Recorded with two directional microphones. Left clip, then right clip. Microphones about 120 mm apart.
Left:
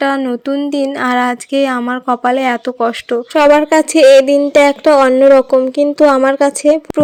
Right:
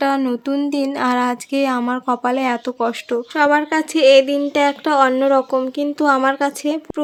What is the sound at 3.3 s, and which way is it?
Speech, 45° left (ahead or behind).